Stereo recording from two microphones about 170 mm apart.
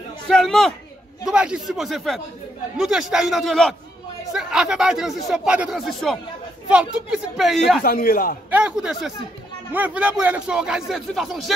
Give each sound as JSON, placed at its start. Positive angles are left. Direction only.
{"t": 0.3, "sound": "speech", "side_deg": 0}
{"t": 7.8, "sound": "a man's voice", "side_deg": 60}
{"t": 8.5, "sound": "speech", "side_deg": -10}